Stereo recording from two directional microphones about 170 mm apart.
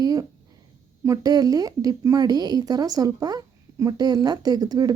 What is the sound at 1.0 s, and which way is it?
A woman's voice, 20° right (ahead or behind).